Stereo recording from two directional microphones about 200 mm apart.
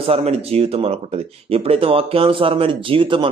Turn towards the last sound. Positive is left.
turn(degrees=-25)  # may be behind; listen again after turning